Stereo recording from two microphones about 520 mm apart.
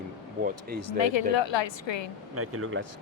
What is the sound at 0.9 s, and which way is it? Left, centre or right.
A woman's voice, left.